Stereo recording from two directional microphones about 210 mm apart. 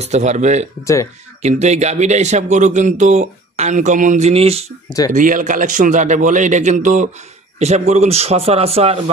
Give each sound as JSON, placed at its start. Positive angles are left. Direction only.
{"t": 0.0, "sound": "a man's voice", "side_deg": -35}